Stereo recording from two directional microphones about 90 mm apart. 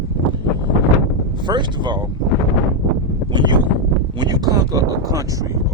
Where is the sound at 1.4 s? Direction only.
55° right (ahead or behind).